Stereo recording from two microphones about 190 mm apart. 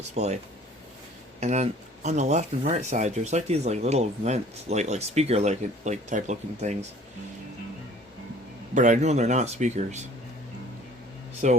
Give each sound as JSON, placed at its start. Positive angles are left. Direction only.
{"t": 0.1, "sound": "speech", "side_deg": -35}
{"t": 1.4, "sound": "speech", "side_deg": -35}
{"t": 8.7, "sound": "speech", "side_deg": -40}
{"t": 11.4, "sound": "speech", "side_deg": -35}